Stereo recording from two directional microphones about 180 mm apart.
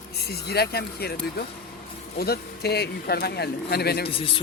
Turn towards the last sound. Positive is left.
turn(degrees=30)  # may be behind; listen again after turning